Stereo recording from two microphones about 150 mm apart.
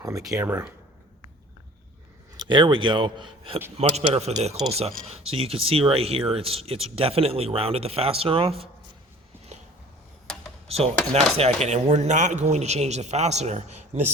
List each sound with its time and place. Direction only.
0.0 s speech: 20° right (ahead or behind)
0.4 s speech: 10° right (ahead or behind)
2.3 s speech: 30° right (ahead or behind)
3.8 s a man's voice: 45° right (ahead or behind)
10.7 s a man's voice: 40° right (ahead or behind)